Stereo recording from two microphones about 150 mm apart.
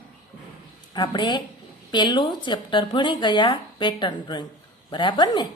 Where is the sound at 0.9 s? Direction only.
30° left (ahead or behind).